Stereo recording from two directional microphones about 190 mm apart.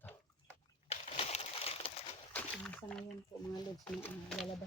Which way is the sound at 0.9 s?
30° left (ahead or behind).